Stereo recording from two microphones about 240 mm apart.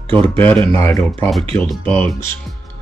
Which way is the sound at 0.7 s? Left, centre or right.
Centre.